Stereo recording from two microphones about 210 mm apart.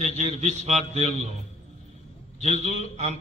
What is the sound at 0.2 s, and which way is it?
Mantra, 35° right (ahead or behind).